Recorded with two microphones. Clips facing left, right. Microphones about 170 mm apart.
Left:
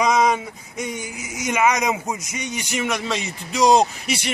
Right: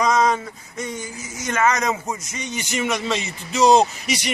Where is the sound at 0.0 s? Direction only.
10° left (ahead or behind).